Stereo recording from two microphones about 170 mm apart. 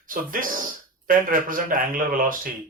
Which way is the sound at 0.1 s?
55° right (ahead or behind).